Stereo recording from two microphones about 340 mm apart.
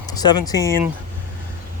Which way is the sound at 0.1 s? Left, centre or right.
Centre.